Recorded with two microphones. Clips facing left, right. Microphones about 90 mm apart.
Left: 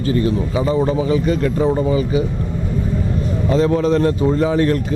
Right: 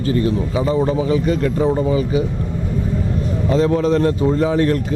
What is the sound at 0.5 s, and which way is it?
A man's voice, 25° left (ahead or behind).